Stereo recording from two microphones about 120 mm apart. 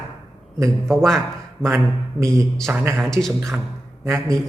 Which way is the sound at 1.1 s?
5° left (ahead or behind).